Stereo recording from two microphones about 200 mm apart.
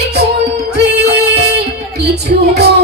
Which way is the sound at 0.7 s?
55° right (ahead or behind).